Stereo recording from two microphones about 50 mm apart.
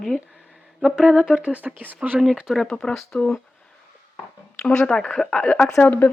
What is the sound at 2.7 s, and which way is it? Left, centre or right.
Speech, centre.